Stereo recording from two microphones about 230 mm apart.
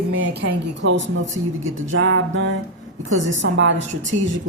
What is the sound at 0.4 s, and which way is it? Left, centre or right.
A woman's voice, right.